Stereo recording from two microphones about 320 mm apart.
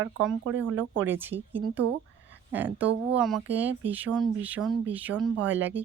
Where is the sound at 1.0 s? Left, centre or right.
Centre.